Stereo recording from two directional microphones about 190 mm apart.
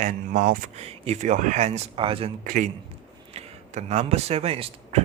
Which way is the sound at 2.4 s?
45° right (ahead or behind).